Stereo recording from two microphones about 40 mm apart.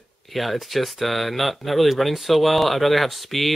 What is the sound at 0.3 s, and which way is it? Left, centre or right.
Speech, centre.